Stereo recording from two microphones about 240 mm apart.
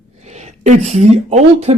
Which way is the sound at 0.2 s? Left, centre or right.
Right.